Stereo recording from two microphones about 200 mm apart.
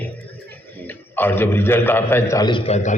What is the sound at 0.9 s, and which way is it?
A man's voice, 10° left (ahead or behind).